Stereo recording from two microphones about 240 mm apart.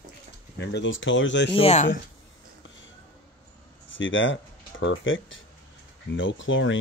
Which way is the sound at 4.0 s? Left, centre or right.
Left.